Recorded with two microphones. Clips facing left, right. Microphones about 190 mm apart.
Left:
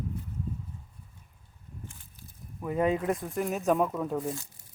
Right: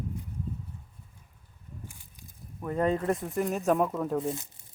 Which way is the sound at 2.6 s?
5° left (ahead or behind).